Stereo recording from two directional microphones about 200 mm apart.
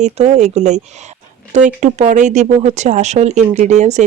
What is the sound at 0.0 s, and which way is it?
Speech, 35° right (ahead or behind).